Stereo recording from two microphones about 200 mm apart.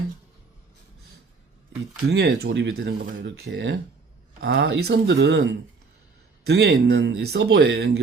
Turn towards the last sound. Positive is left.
turn(degrees=-55)  # may be behind; listen again after turning